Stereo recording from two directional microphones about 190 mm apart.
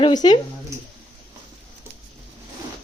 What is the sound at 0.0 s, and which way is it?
Speech, 20° left (ahead or behind).